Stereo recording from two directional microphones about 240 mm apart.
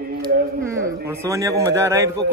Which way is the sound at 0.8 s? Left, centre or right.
Centre.